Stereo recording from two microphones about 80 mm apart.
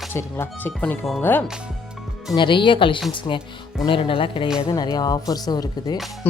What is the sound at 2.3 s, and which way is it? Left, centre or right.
Speech, left.